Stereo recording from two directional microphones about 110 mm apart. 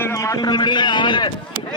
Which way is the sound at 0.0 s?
25° left (ahead or behind).